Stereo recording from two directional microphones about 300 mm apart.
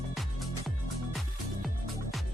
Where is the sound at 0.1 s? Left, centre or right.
Centre.